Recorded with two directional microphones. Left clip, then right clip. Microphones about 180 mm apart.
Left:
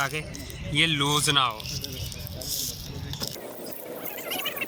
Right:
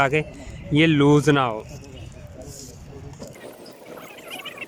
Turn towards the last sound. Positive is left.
turn(degrees=-5)  # may be behind; listen again after turning